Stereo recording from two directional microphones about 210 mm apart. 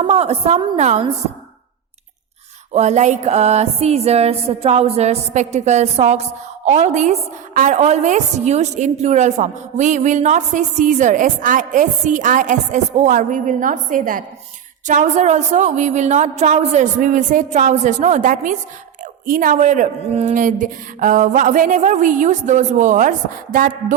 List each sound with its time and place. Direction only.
0.0 s music: 30° right (ahead or behind)
2.7 s music: 35° right (ahead or behind)